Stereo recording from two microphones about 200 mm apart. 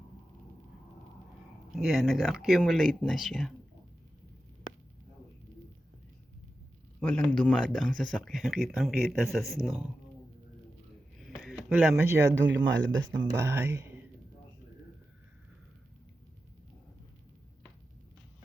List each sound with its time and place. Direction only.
1.7 s speech: centre (ahead or behind)
7.0 s speech: 5° left (ahead or behind)
11.4 s speech: 5° right (ahead or behind)
12.4 s speech: 65° right (ahead or behind)
13.4 s speech: 10° right (ahead or behind)